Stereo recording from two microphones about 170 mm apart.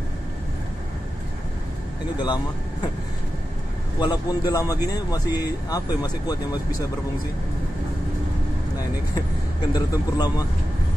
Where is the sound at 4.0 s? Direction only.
25° left (ahead or behind).